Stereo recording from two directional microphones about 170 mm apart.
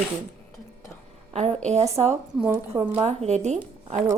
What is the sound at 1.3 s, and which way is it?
A woman's voice, 40° right (ahead or behind).